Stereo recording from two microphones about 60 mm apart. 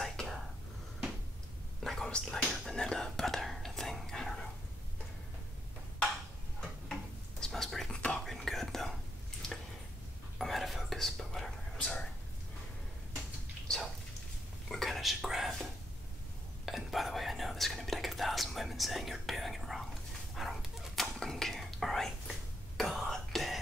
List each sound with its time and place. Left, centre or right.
0.0 s whispering: centre
1.8 s whispering: centre
6.9 s a sound: centre
7.9 s whispering: centre
8.2 s whispering: centre
10.4 s whispering: centre
13.7 s a sound: centre
14.7 s whispering: centre
16.6 s whispering: centre